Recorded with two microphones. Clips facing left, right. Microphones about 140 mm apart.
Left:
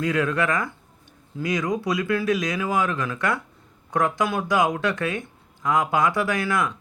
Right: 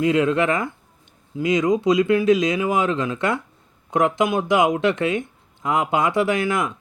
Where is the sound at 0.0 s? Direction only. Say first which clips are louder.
Right 5 dB; 25° right (ahead or behind).